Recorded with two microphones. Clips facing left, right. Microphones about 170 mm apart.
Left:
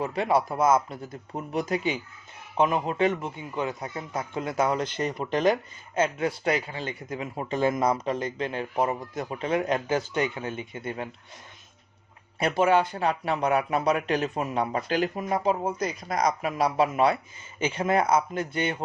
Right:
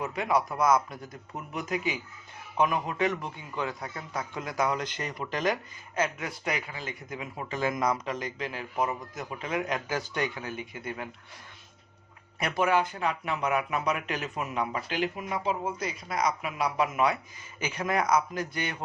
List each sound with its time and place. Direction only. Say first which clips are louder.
0.0 s a man's voice: left 3 dB; 30° left (ahead or behind)
12.4 s a man's voice: left 4 dB; 30° left (ahead or behind)